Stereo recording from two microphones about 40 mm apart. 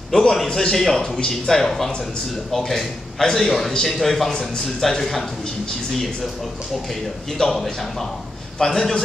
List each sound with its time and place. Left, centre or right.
0.1 s a man's voice: centre
7.5 s a man's voice: centre